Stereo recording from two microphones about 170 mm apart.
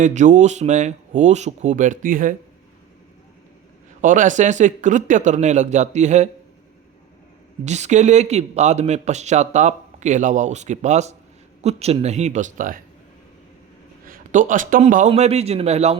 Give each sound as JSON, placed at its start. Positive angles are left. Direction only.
{"t": 0.0, "sound": "a man's voice", "side_deg": -45}
{"t": 4.0, "sound": "a man's voice", "side_deg": -50}
{"t": 7.6, "sound": "a man's voice", "side_deg": -40}
{"t": 14.1, "sound": "a man's voice", "side_deg": -50}